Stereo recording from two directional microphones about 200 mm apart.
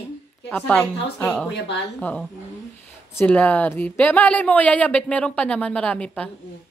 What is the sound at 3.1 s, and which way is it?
A woman's voice, 10° left (ahead or behind).